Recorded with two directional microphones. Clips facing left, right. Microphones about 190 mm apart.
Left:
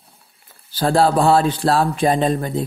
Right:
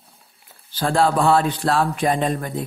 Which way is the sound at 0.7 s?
35° left (ahead or behind).